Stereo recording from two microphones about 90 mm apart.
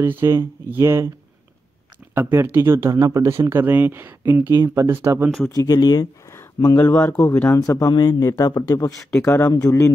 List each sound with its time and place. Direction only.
0.0 s speech: 25° right (ahead or behind)
2.1 s speech: 25° right (ahead or behind)
5.5 s speech: 40° left (ahead or behind)
7.0 s speech: 20° left (ahead or behind)
7.4 s speech: 35° left (ahead or behind)
9.2 s speech: 25° left (ahead or behind)
9.5 s speech: 35° left (ahead or behind)